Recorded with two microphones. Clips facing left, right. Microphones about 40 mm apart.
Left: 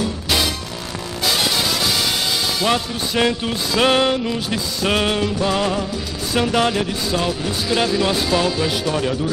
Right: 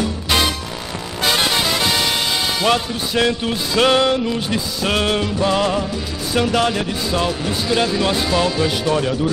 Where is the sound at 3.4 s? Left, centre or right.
Centre.